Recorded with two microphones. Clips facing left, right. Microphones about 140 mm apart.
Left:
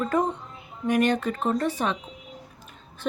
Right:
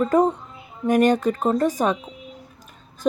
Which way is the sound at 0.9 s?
40° right (ahead or behind).